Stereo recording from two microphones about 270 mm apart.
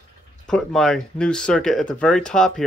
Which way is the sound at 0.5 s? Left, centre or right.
Centre.